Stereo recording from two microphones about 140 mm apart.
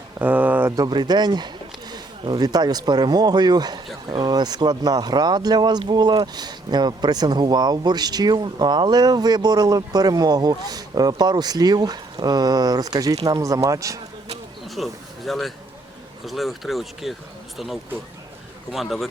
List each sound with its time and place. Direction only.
0.2 s a sound: 15° right (ahead or behind)
0.8 s speech: 30° right (ahead or behind)
14.8 s speech: centre (ahead or behind)
18.7 s speech: centre (ahead or behind)